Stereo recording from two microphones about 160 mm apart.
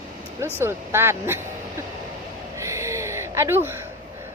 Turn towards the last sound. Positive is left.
turn(degrees=-15)  # may be behind; listen again after turning